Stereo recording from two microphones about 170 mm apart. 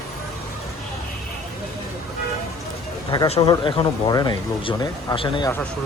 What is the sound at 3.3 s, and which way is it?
Speech, 30° left (ahead or behind).